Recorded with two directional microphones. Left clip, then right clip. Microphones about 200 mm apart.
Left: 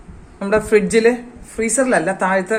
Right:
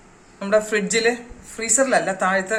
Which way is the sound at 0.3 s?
40° left (ahead or behind).